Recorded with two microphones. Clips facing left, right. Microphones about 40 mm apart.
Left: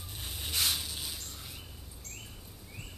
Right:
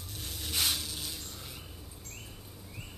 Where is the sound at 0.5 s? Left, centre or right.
Centre.